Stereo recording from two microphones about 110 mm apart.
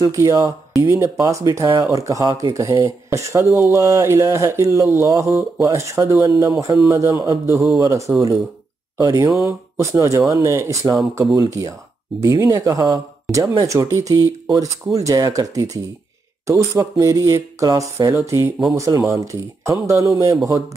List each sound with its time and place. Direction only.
0.0 s speech: 30° right (ahead or behind)
2.5 s speech: 25° right (ahead or behind)